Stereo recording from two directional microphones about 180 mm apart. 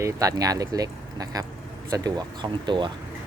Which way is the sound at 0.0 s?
20° right (ahead or behind).